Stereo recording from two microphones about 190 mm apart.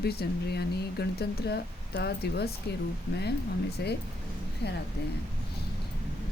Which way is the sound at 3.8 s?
60° left (ahead or behind).